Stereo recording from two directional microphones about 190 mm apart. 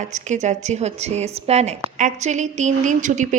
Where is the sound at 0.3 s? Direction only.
40° right (ahead or behind).